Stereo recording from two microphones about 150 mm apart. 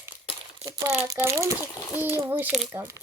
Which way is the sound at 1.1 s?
20° right (ahead or behind).